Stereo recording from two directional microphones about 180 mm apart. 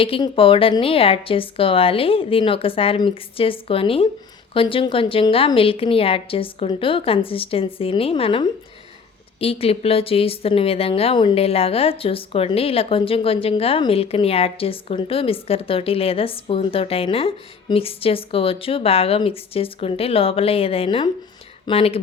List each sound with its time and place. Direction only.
0.0 s speech: 30° left (ahead or behind)